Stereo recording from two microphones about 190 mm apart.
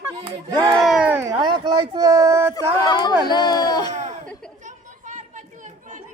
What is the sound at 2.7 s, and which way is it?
Speech, 20° left (ahead or behind).